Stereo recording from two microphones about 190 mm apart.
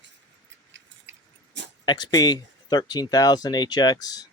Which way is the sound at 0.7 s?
80° right.